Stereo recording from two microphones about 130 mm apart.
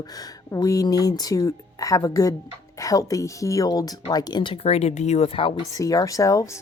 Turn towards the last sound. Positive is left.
turn(degrees=25)  # may be behind; listen again after turning